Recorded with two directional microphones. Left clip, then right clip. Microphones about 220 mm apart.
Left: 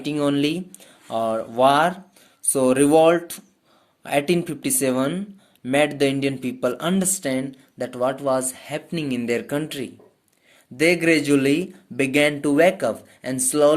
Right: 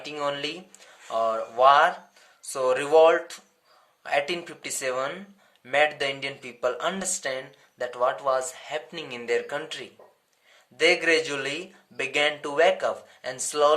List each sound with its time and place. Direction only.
0.0 s speech: 45° left (ahead or behind)
11.0 s speech: 45° left (ahead or behind)